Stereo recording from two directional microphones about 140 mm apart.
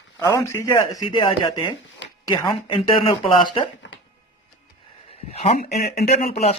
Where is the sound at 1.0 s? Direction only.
40° left (ahead or behind).